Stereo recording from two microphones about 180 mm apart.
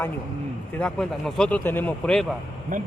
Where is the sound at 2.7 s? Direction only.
45° right (ahead or behind).